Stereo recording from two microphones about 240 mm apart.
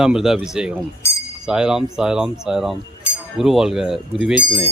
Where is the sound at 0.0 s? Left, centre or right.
Centre.